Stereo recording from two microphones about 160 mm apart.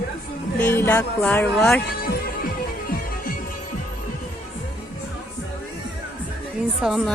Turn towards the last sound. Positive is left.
turn(degrees=0)  # may be behind; listen again after turning